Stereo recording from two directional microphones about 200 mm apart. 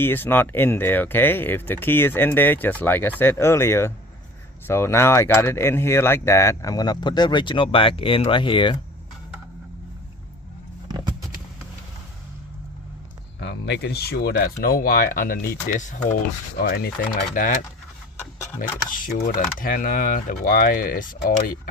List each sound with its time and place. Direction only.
0.0 s speech: 10° left (ahead or behind)
13.4 s speech: 60° left (ahead or behind); by 17.6 s 45° left (ahead or behind)
18.3 s speech: 15° left (ahead or behind)
19.2 s speech: 45° left (ahead or behind)